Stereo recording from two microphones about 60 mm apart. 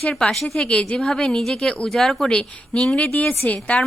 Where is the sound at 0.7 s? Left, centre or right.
Centre.